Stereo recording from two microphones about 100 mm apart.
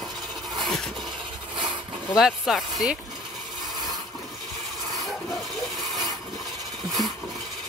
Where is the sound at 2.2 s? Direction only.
5° right (ahead or behind).